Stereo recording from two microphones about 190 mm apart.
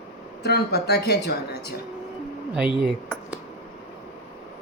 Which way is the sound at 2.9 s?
Centre (ahead or behind).